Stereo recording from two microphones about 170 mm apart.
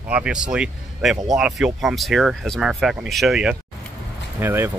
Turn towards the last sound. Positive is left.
turn(degrees=-10)  # may be behind; listen again after turning